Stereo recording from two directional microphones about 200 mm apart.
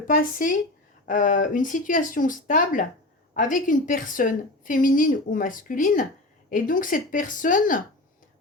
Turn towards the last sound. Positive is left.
turn(degrees=40)  # may be behind; listen again after turning